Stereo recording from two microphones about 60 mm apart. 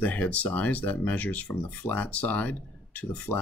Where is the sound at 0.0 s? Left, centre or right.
Left.